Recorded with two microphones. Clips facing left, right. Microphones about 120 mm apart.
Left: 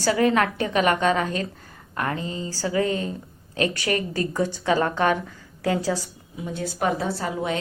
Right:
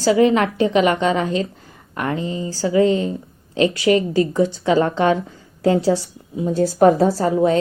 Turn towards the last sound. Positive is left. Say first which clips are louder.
# right 10 dB
turn(degrees=-35)  # may be behind; listen again after turning